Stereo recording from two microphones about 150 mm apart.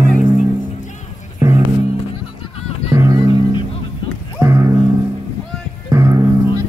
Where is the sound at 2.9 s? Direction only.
20° right (ahead or behind).